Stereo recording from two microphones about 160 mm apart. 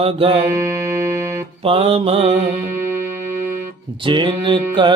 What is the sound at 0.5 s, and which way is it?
Music, 20° right (ahead or behind).